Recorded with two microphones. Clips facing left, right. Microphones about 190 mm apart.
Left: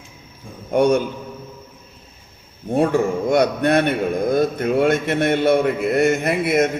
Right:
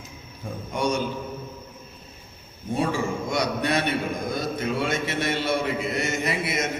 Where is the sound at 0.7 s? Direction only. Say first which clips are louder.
Left 10 dB; 60° left (ahead or behind).